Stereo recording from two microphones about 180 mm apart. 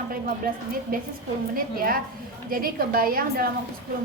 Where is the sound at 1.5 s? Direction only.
50° right (ahead or behind).